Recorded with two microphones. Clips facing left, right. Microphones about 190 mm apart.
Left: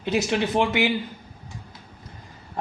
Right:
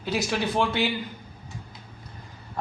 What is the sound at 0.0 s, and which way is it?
Speech, 20° left (ahead or behind).